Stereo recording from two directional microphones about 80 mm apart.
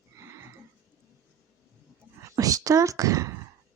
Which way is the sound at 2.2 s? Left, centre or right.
Right.